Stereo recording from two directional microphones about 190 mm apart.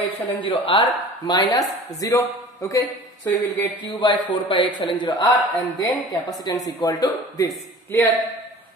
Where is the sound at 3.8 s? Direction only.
25° left (ahead or behind).